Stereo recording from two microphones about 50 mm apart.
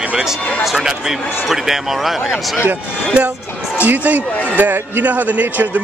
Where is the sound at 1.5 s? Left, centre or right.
Centre.